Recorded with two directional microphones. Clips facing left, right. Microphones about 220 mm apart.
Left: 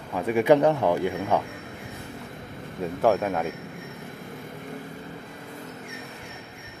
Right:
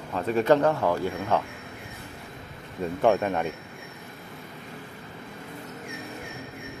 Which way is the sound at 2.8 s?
5° left (ahead or behind).